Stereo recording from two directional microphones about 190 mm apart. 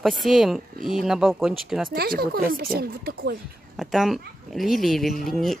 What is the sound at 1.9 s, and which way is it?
Speech, 55° right (ahead or behind).